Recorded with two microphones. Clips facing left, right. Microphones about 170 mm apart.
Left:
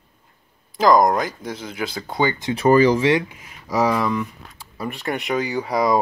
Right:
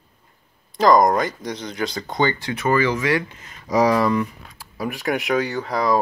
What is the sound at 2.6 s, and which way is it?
Speech, 35° left (ahead or behind).